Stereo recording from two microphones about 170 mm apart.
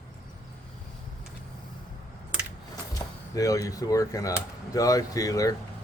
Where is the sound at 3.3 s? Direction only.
20° left (ahead or behind).